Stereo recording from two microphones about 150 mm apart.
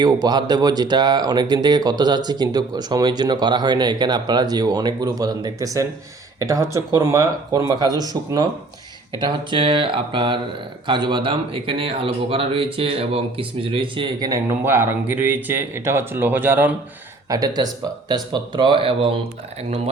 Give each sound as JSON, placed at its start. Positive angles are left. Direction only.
{"t": 0.0, "sound": "speech", "side_deg": -30}
{"t": 17.2, "sound": "speech", "side_deg": -25}